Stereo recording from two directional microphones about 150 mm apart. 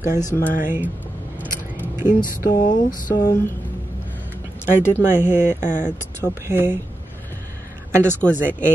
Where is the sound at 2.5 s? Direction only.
65° left (ahead or behind).